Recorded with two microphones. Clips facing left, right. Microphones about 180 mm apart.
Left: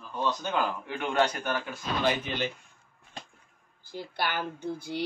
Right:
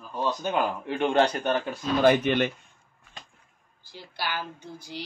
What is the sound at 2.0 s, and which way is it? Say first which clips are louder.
Speech: right 9 dB; 60° right (ahead or behind).